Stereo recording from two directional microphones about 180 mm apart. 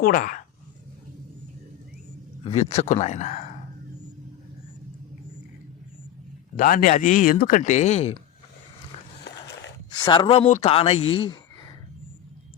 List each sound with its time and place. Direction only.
0.0 s speech: 50° left (ahead or behind)
2.4 s speech: 35° left (ahead or behind)
6.6 s speech: 50° left (ahead or behind)
9.2 s skateboard: 75° left (ahead or behind)
9.9 s speech: 25° left (ahead or behind)